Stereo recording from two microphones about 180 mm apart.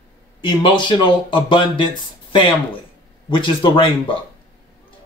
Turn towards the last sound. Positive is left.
turn(degrees=30)  # may be behind; listen again after turning